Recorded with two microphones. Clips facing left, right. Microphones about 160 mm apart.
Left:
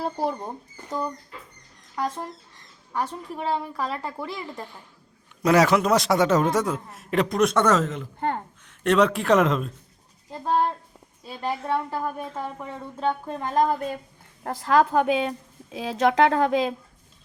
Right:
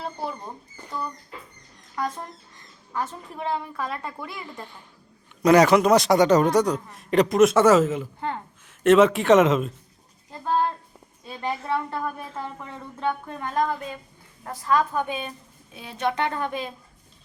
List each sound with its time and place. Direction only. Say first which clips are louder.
0.0 s speech: left 5 dB; 40° left (ahead or behind)
2.0 s speech: left 1 dB; 30° left (ahead or behind)
3.4 s speech: left 1 dB; 30° left (ahead or behind)
5.4 s a man's voice: right 3 dB; centre (ahead or behind)
11.3 s a man's voice: left 1 dB; 5° left (ahead or behind)
11.9 s speech: left 1 dB; 15° left (ahead or behind)
13.2 s speech: left 3 dB; 35° left (ahead or behind)
14.4 s a woman's voice: left 3 dB; 70° left (ahead or behind); by 16.7 s 90° left